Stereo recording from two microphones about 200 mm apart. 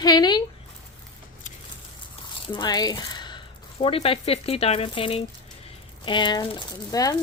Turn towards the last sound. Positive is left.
turn(degrees=20)  # may be behind; listen again after turning